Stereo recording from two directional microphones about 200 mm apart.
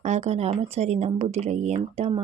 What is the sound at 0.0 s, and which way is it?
Speech, 35° right (ahead or behind).